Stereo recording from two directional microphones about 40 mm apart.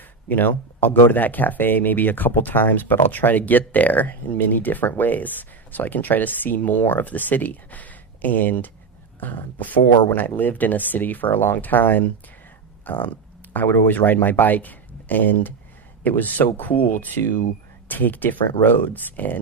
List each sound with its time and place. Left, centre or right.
0.3 s speech: left
12.8 s a sound: left
13.7 s speech: left